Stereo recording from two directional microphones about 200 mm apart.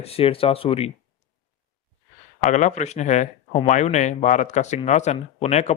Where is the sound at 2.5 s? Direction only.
35° left (ahead or behind).